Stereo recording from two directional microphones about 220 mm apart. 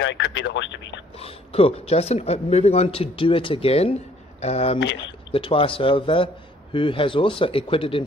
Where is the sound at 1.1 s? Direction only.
25° left (ahead or behind).